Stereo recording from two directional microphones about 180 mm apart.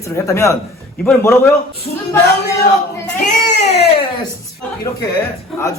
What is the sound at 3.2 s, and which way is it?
Speech, 40° left (ahead or behind).